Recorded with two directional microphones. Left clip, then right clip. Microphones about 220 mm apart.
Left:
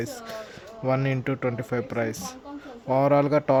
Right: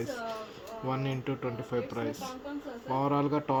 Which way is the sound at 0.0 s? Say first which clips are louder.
Left 2 dB; 45° left (ahead or behind).